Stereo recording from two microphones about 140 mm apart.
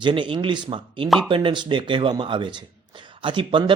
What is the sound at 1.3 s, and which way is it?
Speech, 35° right (ahead or behind).